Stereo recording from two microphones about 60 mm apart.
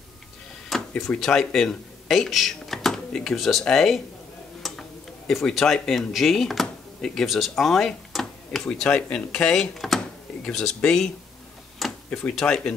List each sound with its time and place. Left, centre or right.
0.7 s speech: centre
4.6 s tick-tock: centre
5.3 s speech: centre
8.7 s speech: centre
12.1 s speech: left
12.4 s speech: centre